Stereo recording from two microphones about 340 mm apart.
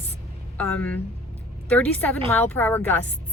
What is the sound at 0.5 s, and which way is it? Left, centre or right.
A woman's voice, centre.